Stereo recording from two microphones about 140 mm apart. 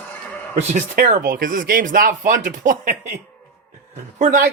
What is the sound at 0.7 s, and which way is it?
Speech, 65° right (ahead or behind).